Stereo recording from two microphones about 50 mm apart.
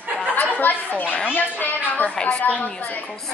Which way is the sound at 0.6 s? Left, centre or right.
Left.